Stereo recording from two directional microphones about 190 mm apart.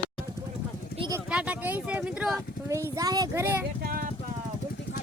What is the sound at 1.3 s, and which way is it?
Speech, 5° right (ahead or behind).